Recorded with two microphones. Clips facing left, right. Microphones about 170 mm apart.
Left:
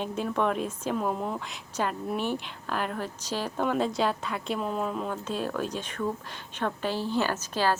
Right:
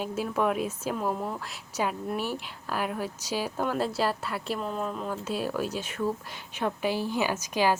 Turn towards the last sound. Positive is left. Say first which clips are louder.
# right 1 dB
turn(degrees=-15)  # may be behind; listen again after turning